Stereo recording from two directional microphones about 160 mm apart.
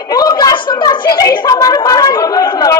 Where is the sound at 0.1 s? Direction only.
25° left (ahead or behind).